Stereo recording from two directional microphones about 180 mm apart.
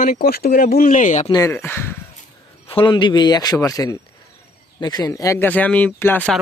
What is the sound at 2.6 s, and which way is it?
Speech, 30° left (ahead or behind).